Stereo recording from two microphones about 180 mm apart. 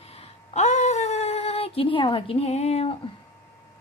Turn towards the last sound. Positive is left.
turn(degrees=35)  # may be behind; listen again after turning